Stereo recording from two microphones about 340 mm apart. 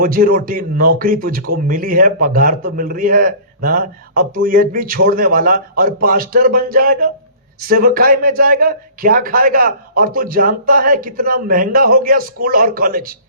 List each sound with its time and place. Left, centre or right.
0.0 s speech: right